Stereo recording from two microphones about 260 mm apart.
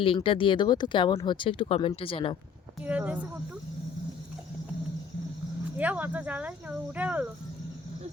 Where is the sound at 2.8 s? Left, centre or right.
Centre.